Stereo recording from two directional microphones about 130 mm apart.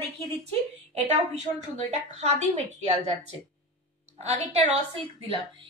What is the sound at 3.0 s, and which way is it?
A woman's voice, 60° right (ahead or behind).